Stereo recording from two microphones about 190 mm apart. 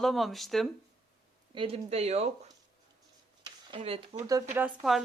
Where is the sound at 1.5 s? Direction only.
30° right (ahead or behind).